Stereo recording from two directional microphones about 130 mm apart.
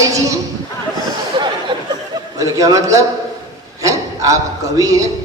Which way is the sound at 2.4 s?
25° right (ahead or behind).